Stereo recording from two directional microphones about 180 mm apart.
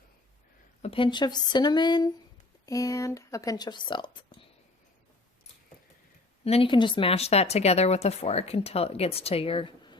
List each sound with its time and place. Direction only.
0.8 s speech: 30° left (ahead or behind)
6.4 s speech: 30° left (ahead or behind)